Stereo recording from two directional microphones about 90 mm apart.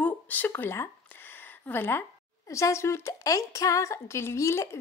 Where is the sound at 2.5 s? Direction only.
35° left (ahead or behind).